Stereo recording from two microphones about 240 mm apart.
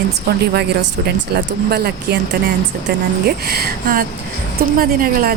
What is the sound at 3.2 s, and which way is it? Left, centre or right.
A woman's voice, right.